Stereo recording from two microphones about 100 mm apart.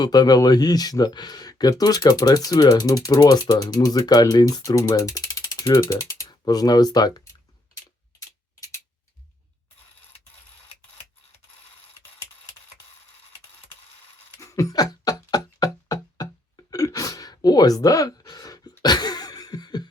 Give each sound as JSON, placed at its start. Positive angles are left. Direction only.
{"t": 0.0, "sound": "speech", "side_deg": 40}
{"t": 14.4, "sound": "music", "side_deg": 35}
{"t": 16.7, "sound": "gasp", "side_deg": 35}
{"t": 18.8, "sound": "a sound", "side_deg": 45}